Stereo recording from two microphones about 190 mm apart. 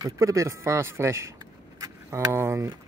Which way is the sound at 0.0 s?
15° right (ahead or behind).